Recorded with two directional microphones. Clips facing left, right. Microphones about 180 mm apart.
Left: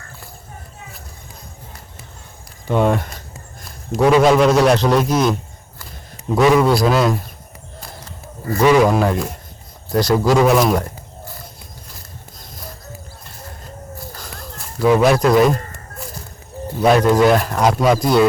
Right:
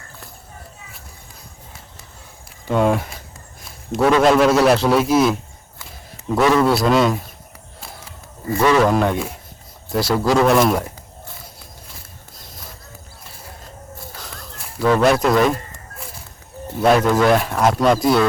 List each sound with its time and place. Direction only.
2.6 s speech: centre (ahead or behind)
3.6 s a sound: centre (ahead or behind)
4.1 s speech: centre (ahead or behind)
7.8 s a sound: 5° right (ahead or behind)
8.6 s speech: 15° left (ahead or behind)
8.9 s speech: centre (ahead or behind)
14.8 s speech: 5° left (ahead or behind)
16.8 s speech: centre (ahead or behind)